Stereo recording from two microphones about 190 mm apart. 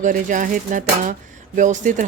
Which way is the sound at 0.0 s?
40° right (ahead or behind).